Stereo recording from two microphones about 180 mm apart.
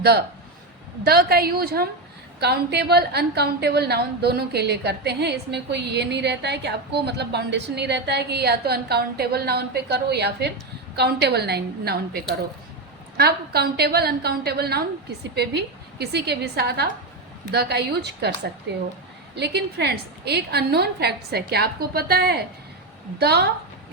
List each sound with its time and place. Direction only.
0.0 s a woman's voice: 60° right (ahead or behind)
19.4 s a woman's voice: 65° right (ahead or behind)